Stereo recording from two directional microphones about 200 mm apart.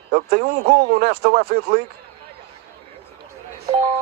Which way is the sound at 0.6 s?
50° right (ahead or behind).